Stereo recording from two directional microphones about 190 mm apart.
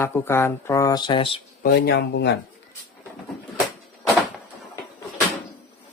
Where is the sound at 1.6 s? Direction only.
55° left (ahead or behind).